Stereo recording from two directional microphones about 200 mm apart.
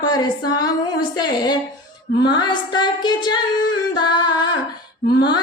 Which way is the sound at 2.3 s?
20° left (ahead or behind).